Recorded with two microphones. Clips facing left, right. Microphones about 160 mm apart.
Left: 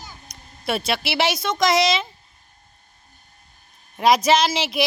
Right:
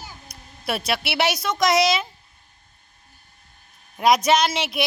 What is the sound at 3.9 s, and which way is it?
Speech, centre (ahead or behind).